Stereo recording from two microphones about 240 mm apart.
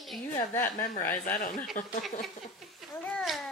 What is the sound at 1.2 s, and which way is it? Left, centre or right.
Speech, left.